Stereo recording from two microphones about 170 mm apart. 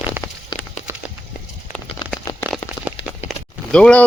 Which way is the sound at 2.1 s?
10° left (ahead or behind).